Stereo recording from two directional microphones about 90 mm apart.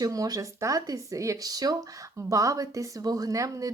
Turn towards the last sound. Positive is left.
turn(degrees=-40)  # may be behind; listen again after turning